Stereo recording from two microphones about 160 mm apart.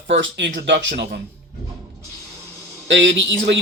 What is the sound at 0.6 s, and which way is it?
Speech, 90° right.